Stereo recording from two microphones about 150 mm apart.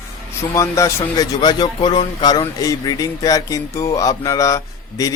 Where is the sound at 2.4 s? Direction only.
25° left (ahead or behind).